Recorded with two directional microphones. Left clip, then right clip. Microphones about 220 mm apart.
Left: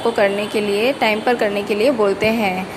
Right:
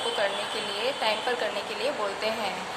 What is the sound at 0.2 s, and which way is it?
Speech, 30° left (ahead or behind).